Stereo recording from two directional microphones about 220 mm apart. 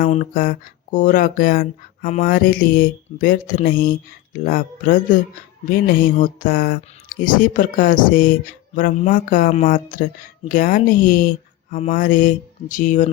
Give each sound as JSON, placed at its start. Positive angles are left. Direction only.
{"t": 0.0, "sound": "speech", "side_deg": 35}